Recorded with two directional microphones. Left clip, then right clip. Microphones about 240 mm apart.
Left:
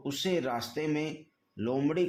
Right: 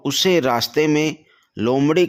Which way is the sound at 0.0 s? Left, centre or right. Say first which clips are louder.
Right 14 dB; right.